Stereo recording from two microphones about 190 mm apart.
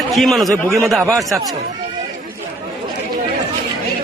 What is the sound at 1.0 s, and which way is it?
Speech, 15° right (ahead or behind).